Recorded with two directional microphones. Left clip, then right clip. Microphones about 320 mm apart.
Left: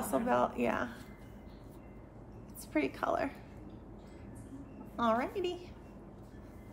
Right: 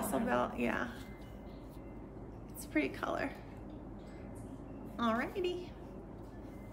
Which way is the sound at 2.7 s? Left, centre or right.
Centre.